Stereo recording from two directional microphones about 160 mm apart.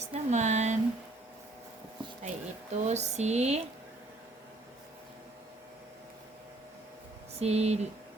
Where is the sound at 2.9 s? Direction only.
45° right (ahead or behind).